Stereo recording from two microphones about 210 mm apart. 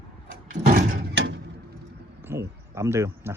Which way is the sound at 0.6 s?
45° right (ahead or behind).